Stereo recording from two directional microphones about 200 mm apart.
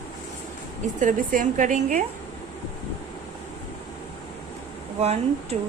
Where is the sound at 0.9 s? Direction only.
40° right (ahead or behind).